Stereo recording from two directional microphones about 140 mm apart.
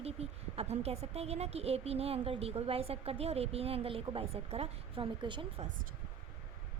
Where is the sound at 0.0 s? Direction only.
45° right (ahead or behind).